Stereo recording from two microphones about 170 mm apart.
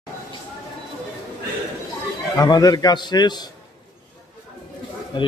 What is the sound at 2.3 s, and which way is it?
A man's voice, 20° left (ahead or behind).